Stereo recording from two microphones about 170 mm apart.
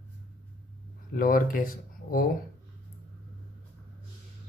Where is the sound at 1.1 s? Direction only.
55° left (ahead or behind).